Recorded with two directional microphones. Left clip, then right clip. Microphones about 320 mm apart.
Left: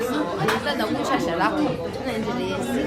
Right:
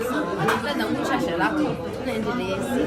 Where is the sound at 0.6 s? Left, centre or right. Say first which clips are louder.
Left 1 dB; centre.